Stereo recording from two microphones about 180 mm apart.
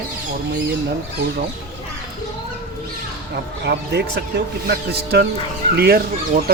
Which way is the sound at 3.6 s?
65° right (ahead or behind).